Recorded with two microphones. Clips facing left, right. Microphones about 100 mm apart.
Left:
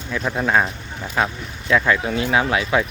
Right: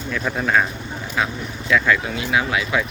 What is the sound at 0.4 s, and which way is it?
Speech, 25° left (ahead or behind).